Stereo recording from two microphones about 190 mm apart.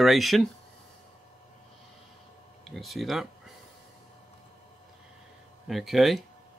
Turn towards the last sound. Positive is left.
turn(degrees=0)  # may be behind; listen again after turning